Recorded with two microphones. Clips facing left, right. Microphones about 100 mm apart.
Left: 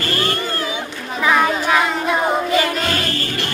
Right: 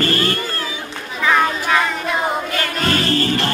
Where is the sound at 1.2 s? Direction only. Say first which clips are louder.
Left 1 dB; 10° left (ahead or behind).